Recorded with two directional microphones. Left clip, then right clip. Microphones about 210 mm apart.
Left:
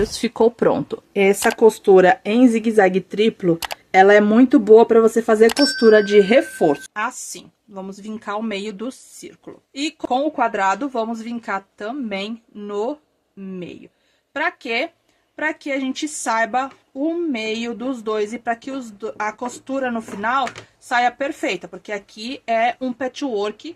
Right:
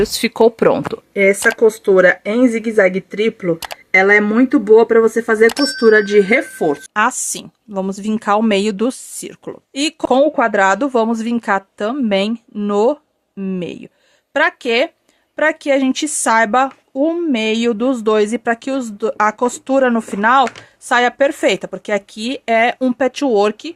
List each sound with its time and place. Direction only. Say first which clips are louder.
0.0 s speech: right 5 dB; 15° right (ahead or behind)
1.4 s speech: right 2 dB; 5° left (ahead or behind)
6.9 s speech: right 9 dB; 50° right (ahead or behind)